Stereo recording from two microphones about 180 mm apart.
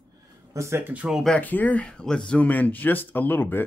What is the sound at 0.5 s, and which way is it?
Speech, 10° right (ahead or behind).